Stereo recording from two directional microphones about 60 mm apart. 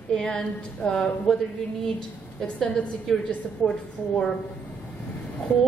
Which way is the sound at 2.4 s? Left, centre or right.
Centre.